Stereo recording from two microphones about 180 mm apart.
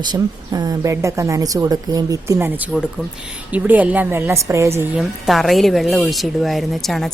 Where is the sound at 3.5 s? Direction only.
10° right (ahead or behind).